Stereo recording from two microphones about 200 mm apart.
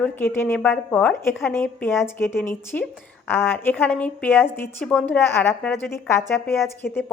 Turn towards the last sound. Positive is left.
turn(degrees=0)  # may be behind; listen again after turning